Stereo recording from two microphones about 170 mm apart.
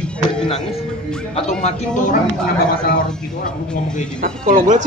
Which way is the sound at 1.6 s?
45° left (ahead or behind).